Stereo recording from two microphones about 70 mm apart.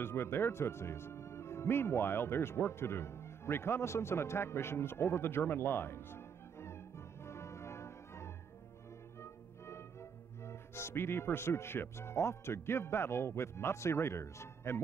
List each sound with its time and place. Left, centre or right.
0.0 s speech: left
7.2 s music: left
10.4 s speech: left